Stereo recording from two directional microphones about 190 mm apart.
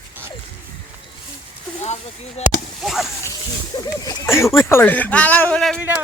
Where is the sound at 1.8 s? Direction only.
35° left (ahead or behind).